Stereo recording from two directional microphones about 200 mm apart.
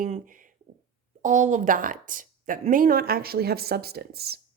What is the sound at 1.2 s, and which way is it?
Speech, 40° right (ahead or behind).